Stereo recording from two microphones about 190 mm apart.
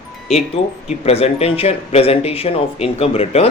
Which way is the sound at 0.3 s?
35° left (ahead or behind).